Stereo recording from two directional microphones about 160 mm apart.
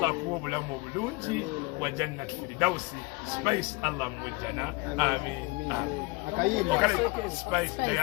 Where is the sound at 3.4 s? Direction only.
20° right (ahead or behind).